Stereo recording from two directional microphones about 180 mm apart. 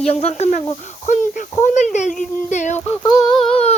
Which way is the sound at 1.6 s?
40° left (ahead or behind).